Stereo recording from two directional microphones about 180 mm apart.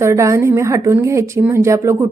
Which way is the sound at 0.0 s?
15° right (ahead or behind).